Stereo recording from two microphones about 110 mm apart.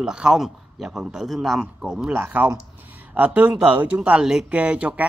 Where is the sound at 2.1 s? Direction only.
20° right (ahead or behind).